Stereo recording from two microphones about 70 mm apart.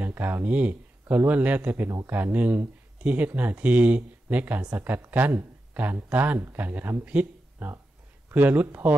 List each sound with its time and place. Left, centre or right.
0.0 s speech: right